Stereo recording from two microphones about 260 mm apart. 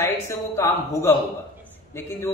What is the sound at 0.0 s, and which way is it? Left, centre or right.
A man's voice, centre.